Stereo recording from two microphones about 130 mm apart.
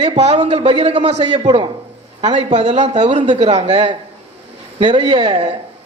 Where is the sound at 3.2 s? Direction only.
50° right (ahead or behind).